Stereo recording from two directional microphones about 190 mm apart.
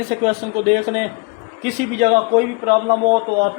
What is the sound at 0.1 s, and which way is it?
A man's voice, 40° right (ahead or behind).